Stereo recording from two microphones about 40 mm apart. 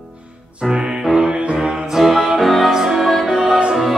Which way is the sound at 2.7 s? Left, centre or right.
Centre.